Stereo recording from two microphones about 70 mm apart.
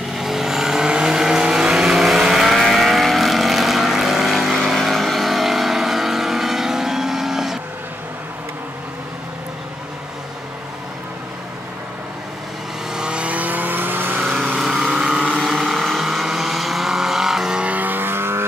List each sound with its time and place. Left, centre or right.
0.1 s vehicle: centre
12.9 s vehicle: centre
14.4 s vehicle: centre; by 18.4 s right